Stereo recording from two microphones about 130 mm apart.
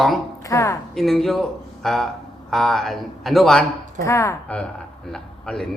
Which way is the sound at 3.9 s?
25° left (ahead or behind).